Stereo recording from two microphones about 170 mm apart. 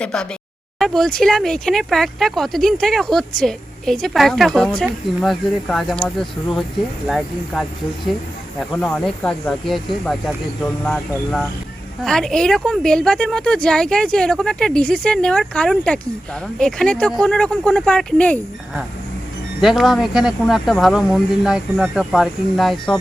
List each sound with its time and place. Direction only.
0.0 s speech: 5° left (ahead or behind)
19.6 s speech: centre (ahead or behind)